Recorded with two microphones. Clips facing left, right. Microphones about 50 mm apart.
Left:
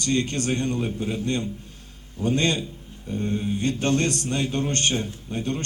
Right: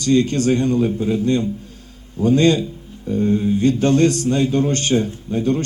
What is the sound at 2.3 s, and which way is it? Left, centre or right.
A man's voice, left.